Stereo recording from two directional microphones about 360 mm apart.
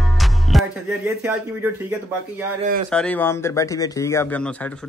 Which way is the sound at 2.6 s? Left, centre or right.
Right.